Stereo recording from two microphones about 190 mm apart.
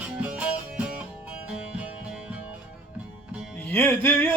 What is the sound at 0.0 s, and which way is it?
Music, 5° right (ahead or behind).